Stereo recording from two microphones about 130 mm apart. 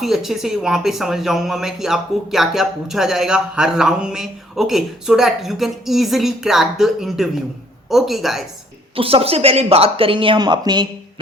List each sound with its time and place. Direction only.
0.0 s a woman's voice: centre (ahead or behind)
9.0 s speech: 45° right (ahead or behind)